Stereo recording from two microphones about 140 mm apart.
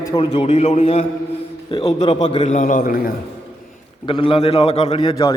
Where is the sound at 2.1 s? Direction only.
40° left (ahead or behind).